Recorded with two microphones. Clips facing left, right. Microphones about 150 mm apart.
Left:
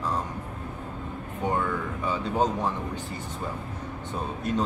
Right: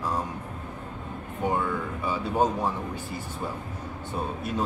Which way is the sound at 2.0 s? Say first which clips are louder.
Right 1 dB; 10° right (ahead or behind).